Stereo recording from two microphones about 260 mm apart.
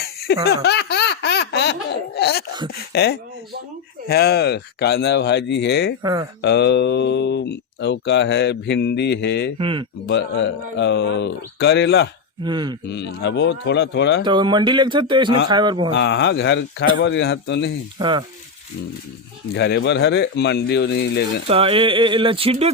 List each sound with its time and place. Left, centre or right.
0.4 s baby laughter: left
2.1 s wail: left
2.9 s speech: left
6.0 s speech: centre
6.4 s speech: left
9.6 s speech: centre
10.1 s speech: left
12.4 s speech: centre
12.9 s speech: left
14.3 s speech: centre
15.9 s speech: left
18.0 s speech: centre
19.5 s speech: left
21.4 s speech: right